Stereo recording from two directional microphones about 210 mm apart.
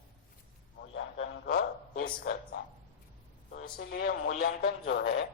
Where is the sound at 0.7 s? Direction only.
55° left (ahead or behind).